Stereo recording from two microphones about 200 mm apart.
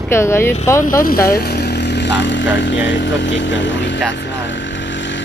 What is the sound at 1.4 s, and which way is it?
Speech, 55° left (ahead or behind).